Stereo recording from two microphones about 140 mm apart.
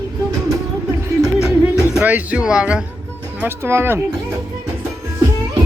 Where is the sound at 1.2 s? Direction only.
5° right (ahead or behind).